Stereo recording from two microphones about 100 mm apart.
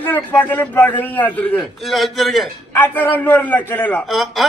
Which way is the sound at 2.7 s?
20° left (ahead or behind).